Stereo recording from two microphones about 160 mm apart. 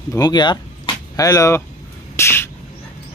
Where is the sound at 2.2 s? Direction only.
15° left (ahead or behind).